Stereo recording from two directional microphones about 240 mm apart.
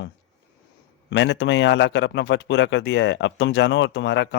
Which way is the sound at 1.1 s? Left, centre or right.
Left.